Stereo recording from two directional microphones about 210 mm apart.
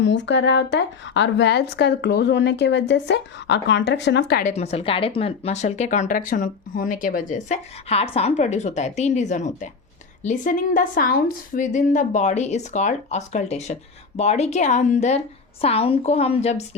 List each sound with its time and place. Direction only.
0.0 s a woman's voice: 60° left (ahead or behind)
4.5 s a woman's voice: 30° left (ahead or behind)